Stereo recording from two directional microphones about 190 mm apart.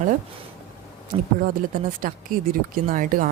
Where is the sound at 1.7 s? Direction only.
45° right (ahead or behind).